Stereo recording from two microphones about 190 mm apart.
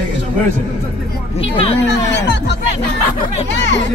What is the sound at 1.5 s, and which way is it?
Speech, 30° left (ahead or behind).